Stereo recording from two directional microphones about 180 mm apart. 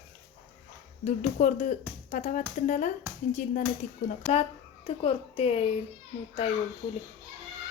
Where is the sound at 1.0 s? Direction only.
40° left (ahead or behind).